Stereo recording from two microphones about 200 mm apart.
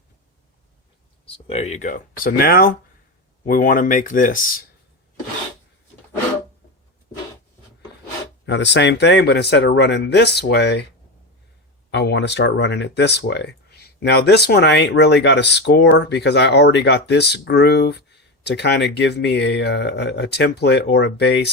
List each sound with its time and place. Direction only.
1.2 s speech: 30° left (ahead or behind)
8.4 s speech: 60° left (ahead or behind)
11.9 s speech: 60° left (ahead or behind)